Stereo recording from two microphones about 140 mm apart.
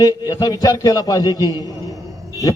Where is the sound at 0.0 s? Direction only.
25° left (ahead or behind).